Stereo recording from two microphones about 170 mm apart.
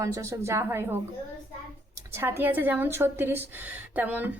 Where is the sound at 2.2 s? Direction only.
10° right (ahead or behind).